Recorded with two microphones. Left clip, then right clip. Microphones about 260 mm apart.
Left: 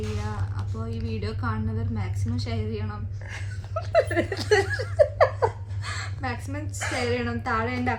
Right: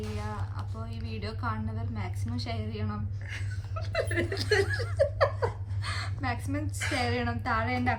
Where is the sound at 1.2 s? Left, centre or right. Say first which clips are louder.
Left 1 dB; centre.